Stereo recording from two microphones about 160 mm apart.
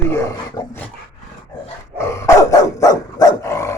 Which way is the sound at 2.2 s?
20° left (ahead or behind).